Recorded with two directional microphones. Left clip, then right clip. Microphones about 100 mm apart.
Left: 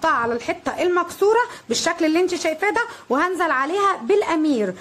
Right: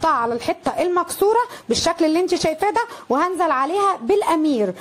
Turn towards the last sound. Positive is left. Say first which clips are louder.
# right 2 dB
turn(degrees=-45)  # may be behind; listen again after turning